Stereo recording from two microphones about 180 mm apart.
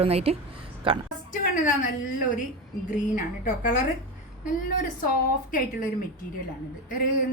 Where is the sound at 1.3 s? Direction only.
45° left (ahead or behind).